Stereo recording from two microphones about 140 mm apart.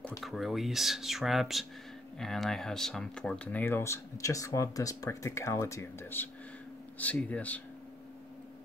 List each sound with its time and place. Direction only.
0.2 s speech: centre (ahead or behind)